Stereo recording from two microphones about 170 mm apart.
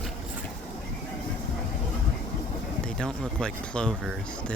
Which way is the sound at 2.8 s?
5° left (ahead or behind).